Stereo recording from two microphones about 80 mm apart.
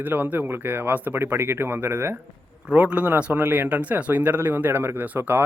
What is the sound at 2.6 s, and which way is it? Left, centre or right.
A man's voice, centre.